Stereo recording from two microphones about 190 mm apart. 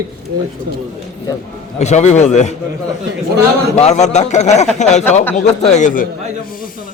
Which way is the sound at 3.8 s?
35° left (ahead or behind).